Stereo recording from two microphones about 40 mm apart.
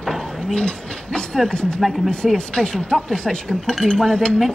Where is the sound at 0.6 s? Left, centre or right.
Left.